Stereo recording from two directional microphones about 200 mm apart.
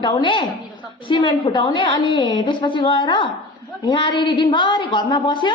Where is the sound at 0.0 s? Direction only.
25° left (ahead or behind).